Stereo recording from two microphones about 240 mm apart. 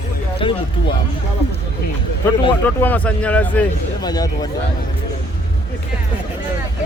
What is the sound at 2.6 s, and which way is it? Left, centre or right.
Speech, centre.